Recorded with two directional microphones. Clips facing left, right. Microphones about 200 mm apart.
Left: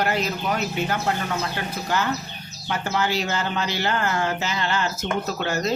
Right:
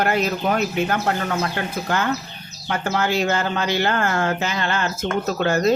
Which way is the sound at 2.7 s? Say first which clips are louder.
Right 3 dB; 55° right (ahead or behind).